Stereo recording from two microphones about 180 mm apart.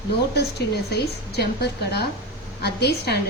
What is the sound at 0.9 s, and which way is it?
A woman's voice, 60° left (ahead or behind).